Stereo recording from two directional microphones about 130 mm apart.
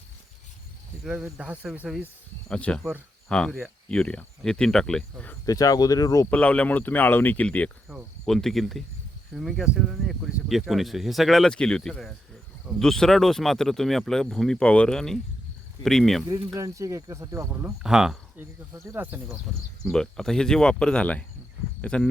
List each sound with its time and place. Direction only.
1.2 s speech: 10° right (ahead or behind)
2.5 s speech: 10° left (ahead or behind)
5.5 s speech: 25° left (ahead or behind)
6.3 s speech: 10° left (ahead or behind)
7.9 s speech: centre (ahead or behind)
16.6 s speech: 25° right (ahead or behind)
17.8 s speech: 5° right (ahead or behind)
18.3 s speech: 15° right (ahead or behind)
19.8 s speech: 5° left (ahead or behind)